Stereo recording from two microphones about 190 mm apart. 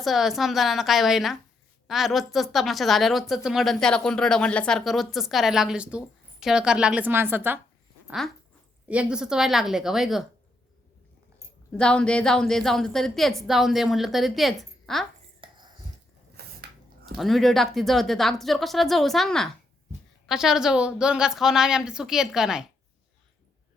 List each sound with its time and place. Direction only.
0.0 s a woman's voice: centre (ahead or behind)
8.9 s a woman's voice: 5° right (ahead or behind)
11.7 s a woman's voice: 5° left (ahead or behind)
15.4 s cutlery: 25° right (ahead or behind)
16.4 s a sound: 55° right (ahead or behind)
17.2 s a woman's voice: centre (ahead or behind)